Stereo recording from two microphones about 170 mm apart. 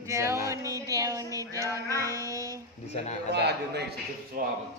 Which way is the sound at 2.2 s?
20° right (ahead or behind).